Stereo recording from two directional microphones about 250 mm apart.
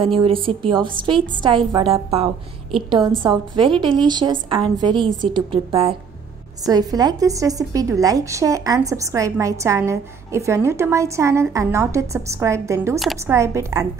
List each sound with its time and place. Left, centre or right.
0.0 s a woman's voice: right